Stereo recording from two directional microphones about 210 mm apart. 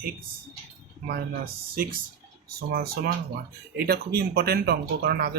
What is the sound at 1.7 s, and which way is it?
Speech, 45° right (ahead or behind).